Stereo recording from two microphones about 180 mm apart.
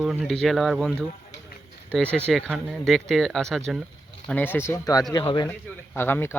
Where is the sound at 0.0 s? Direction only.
Centre (ahead or behind); by 5.5 s 25° left (ahead or behind).